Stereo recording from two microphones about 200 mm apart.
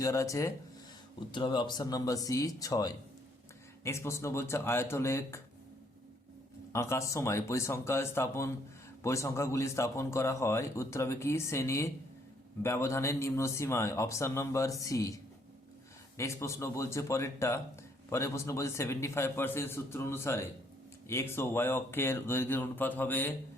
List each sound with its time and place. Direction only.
0.0 s a man's voice: 15° left (ahead or behind)
6.7 s a man's voice: 15° left (ahead or behind)